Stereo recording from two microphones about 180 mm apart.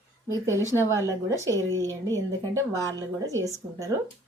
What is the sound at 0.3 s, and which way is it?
A woman's voice, 15° right (ahead or behind).